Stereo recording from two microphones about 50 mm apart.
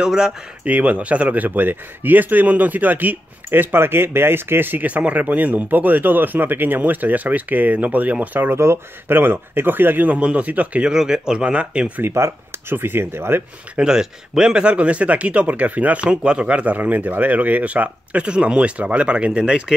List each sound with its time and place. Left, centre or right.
0.0 s speech: centre
0.7 s speech: right
4.8 s speech: right
8.5 s speech: right
9.1 s speech: right
10.8 s speech: centre
12.0 s speech: right
13.7 s speech: centre
16.7 s speech: right